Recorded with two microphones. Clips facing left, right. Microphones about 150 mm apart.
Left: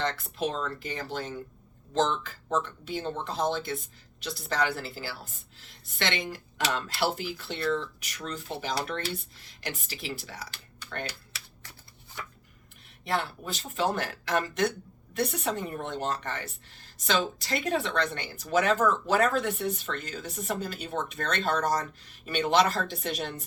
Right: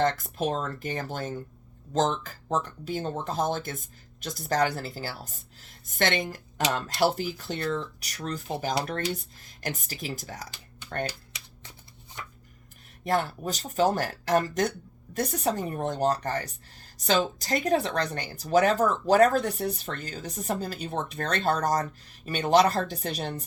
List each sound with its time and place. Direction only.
0.0 s speech: 45° right (ahead or behind)
11.0 s typing: 15° right (ahead or behind)
13.1 s speech: 45° right (ahead or behind)